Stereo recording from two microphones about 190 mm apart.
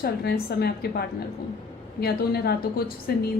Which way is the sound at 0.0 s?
55° left (ahead or behind).